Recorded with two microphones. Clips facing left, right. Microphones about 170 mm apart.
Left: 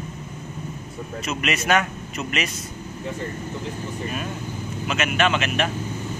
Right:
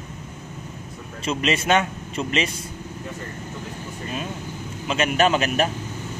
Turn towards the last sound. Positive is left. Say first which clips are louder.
# right 2 dB
turn(degrees=-35)  # may be behind; listen again after turning